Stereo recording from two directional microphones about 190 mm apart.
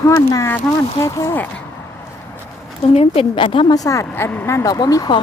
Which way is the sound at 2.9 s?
30° left (ahead or behind).